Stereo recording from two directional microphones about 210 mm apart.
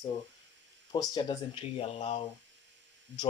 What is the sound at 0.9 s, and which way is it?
Speech, 20° left (ahead or behind).